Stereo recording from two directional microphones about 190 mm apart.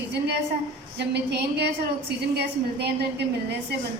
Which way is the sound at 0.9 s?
60° right (ahead or behind).